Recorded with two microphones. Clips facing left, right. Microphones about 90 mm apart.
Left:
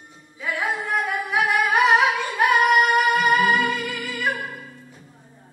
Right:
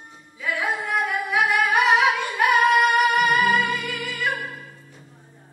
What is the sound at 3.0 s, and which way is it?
Music, 20° left (ahead or behind).